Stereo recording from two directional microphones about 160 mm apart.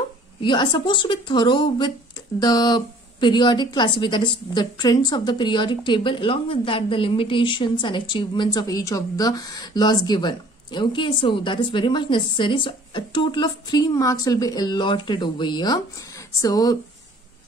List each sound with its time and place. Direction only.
0.4 s a woman's voice: 30° left (ahead or behind)